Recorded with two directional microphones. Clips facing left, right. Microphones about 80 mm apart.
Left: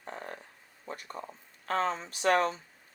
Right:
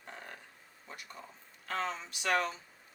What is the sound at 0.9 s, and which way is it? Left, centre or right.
Speech, left.